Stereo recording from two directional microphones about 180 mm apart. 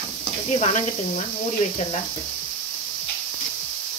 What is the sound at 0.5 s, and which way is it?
Speech, 40° left (ahead or behind).